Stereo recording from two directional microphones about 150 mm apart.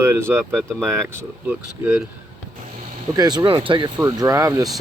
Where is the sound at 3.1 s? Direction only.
25° right (ahead or behind).